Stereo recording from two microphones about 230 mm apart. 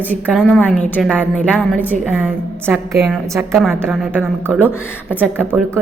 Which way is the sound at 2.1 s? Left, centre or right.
Centre.